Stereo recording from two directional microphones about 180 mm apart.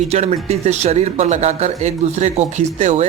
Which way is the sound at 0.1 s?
35° right (ahead or behind).